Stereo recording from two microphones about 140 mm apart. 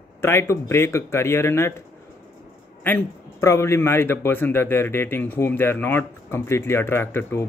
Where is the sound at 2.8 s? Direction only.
15° left (ahead or behind).